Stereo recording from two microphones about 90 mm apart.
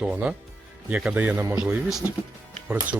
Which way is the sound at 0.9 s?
15° right (ahead or behind).